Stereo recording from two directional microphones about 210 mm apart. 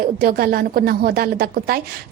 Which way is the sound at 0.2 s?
45° right (ahead or behind).